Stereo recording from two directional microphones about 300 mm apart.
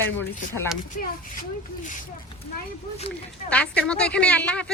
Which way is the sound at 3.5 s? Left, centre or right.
Centre.